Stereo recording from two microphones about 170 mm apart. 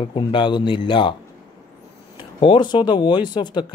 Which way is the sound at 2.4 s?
25° left (ahead or behind).